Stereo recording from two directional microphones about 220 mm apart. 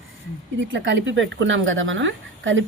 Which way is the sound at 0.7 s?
55° right (ahead or behind).